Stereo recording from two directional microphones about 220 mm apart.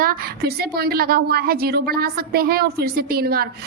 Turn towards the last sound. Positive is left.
turn(degrees=-45)  # may be behind; listen again after turning